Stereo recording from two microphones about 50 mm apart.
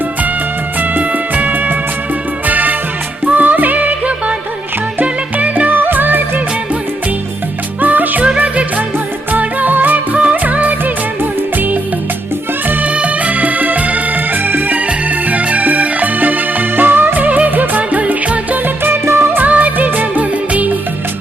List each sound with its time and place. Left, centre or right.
0.8 s music: right
7.8 s music: right
9.3 s music: right
14.8 s music: right
19.4 s music: right